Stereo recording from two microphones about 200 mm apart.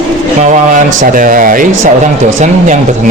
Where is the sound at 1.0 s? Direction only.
45° right (ahead or behind).